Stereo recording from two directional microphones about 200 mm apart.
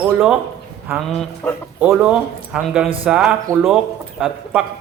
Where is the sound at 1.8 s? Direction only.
5° right (ahead or behind).